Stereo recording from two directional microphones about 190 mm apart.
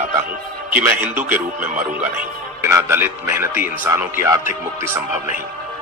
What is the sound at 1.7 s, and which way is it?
Speech, 45° right (ahead or behind).